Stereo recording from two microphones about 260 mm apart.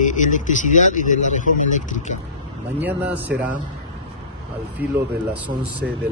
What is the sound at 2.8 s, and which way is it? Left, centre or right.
Speech, centre.